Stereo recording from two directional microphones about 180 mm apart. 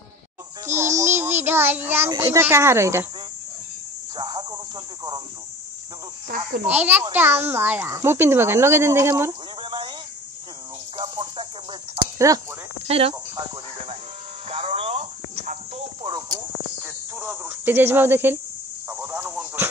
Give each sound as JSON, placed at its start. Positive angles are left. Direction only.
{"t": 0.7, "sound": "child singing", "side_deg": -15}
{"t": 2.1, "sound": "a child's voice", "side_deg": -15}
{"t": 4.2, "sound": "cricket", "side_deg": -25}
{"t": 6.2, "sound": "a child's voice", "side_deg": -50}
{"t": 6.7, "sound": "a child's voice", "side_deg": -10}
{"t": 9.6, "sound": "a sound", "side_deg": -25}
{"t": 11.0, "sound": "a sound", "side_deg": -30}
{"t": 12.3, "sound": "a child's voice", "side_deg": -15}
{"t": 12.8, "sound": "speech", "side_deg": -35}
{"t": 14.5, "sound": "music", "side_deg": -30}
{"t": 16.0, "sound": "speech", "side_deg": -25}
{"t": 16.8, "sound": "speech", "side_deg": -10}
{"t": 18.9, "sound": "a sound", "side_deg": -10}